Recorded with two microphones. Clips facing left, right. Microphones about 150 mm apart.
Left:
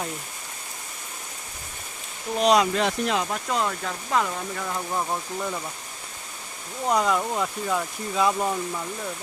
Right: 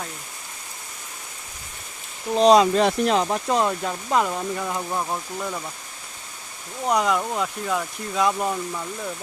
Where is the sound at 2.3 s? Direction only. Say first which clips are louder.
Right 5 dB; 30° right (ahead or behind).